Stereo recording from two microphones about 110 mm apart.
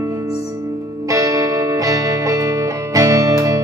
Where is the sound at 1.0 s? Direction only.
30° right (ahead or behind).